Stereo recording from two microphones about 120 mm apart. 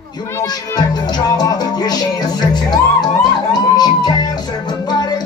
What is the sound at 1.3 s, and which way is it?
Music, 35° left (ahead or behind).